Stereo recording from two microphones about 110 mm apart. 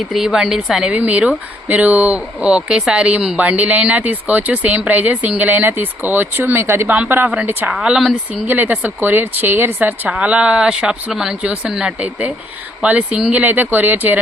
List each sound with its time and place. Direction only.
0.1 s speech: 5° right (ahead or behind)